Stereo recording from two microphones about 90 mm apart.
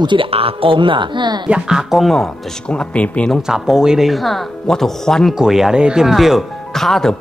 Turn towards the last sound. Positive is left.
turn(degrees=5)  # may be behind; listen again after turning